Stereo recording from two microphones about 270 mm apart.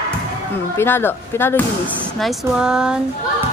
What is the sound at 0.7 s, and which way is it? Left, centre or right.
A woman's voice, centre.